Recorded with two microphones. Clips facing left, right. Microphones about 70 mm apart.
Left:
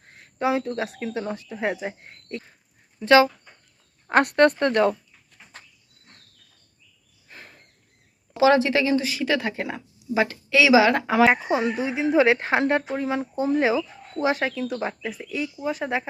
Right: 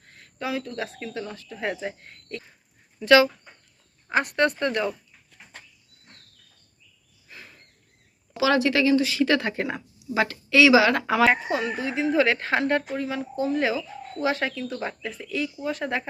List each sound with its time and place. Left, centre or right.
0.0 s a sound: left
0.9 s speech: centre
4.1 s speech: left
7.3 s a sound: left
8.4 s speech: left
9.2 s speech: centre
10.2 s speech: centre
14.3 s speech: centre